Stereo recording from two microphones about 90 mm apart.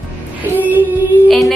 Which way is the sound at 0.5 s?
20° right (ahead or behind).